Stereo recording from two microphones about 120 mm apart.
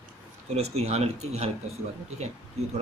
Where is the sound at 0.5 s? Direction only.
60° right (ahead or behind).